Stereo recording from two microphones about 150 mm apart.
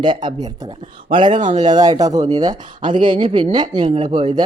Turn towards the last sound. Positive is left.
turn(degrees=-30)  # may be behind; listen again after turning